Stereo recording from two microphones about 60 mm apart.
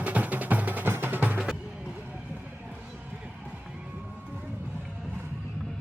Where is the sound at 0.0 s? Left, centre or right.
Right.